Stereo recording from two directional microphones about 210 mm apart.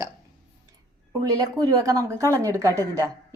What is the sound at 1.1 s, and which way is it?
A woman's voice, 15° right (ahead or behind).